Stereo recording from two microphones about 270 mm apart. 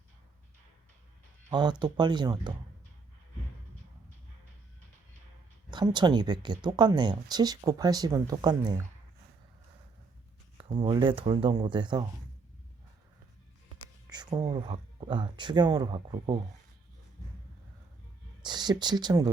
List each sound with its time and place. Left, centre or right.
1.5 s speech: centre
5.7 s speech: centre
10.6 s speech: centre
14.1 s speech: centre
18.4 s speech: centre